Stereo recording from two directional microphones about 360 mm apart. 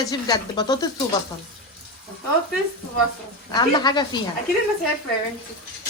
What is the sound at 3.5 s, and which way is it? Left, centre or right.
Speech, centre.